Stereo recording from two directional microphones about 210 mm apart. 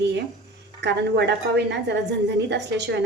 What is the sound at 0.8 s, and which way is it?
A woman's voice, 55° right (ahead or behind).